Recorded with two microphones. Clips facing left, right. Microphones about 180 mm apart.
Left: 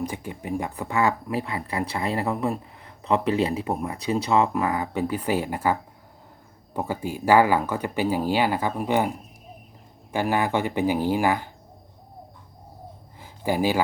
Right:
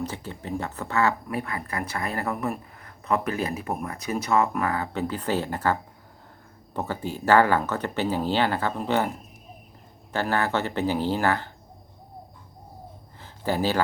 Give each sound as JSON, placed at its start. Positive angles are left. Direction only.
{"t": 0.0, "sound": "speech", "side_deg": 15}
{"t": 1.4, "sound": "speech", "side_deg": 25}
{"t": 6.7, "sound": "speech", "side_deg": 10}
{"t": 13.1, "sound": "a sound", "side_deg": 10}